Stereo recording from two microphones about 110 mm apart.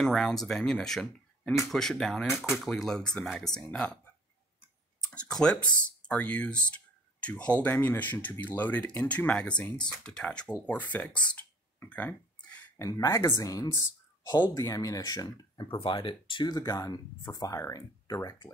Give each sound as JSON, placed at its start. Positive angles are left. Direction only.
{"t": 0.0, "sound": "speech", "side_deg": 5}
{"t": 5.1, "sound": "speech", "side_deg": 10}
{"t": 12.7, "sound": "speech", "side_deg": 30}
{"t": 16.5, "sound": "speech", "side_deg": 30}